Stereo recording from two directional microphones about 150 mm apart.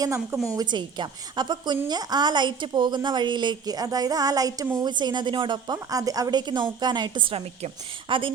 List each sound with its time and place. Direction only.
0.0 s a woman's voice: 20° right (ahead or behind)
0.5 s a woman's voice: 30° right (ahead or behind)